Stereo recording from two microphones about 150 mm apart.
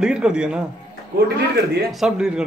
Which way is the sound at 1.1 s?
90° right.